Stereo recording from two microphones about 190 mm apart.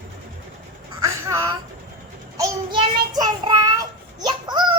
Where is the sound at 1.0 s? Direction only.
15° right (ahead or behind).